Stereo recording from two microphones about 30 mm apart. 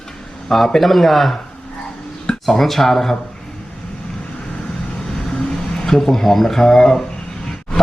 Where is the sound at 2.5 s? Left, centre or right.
Centre.